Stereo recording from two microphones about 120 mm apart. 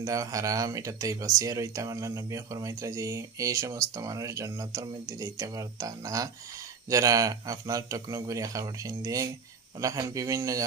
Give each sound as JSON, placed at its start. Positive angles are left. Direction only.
{"t": 0.0, "sound": "speech", "side_deg": -30}